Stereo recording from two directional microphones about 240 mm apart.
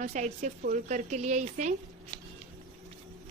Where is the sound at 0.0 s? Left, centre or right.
Right.